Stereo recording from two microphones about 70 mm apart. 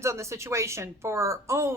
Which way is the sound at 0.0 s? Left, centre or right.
Right.